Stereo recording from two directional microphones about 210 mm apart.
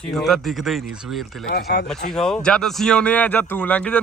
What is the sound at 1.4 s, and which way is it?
Speech, 50° left (ahead or behind).